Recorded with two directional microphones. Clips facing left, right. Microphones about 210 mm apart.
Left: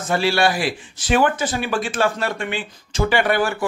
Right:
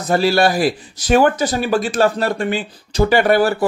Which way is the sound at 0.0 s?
40° right (ahead or behind).